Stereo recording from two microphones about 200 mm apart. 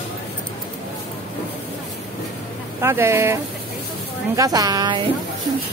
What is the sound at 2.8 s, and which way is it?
Speech, 10° right (ahead or behind).